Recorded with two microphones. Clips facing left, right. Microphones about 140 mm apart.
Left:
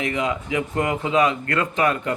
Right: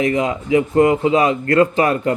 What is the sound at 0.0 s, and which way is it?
Speech, 35° right (ahead or behind).